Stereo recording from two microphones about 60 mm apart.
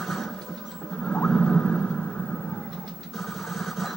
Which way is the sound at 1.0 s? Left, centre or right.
Centre.